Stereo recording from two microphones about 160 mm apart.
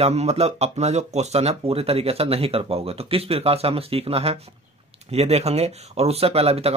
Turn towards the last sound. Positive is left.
turn(degrees=-40)  # may be behind; listen again after turning